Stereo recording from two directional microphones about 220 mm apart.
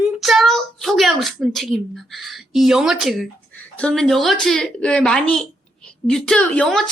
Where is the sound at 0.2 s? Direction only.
Centre (ahead or behind).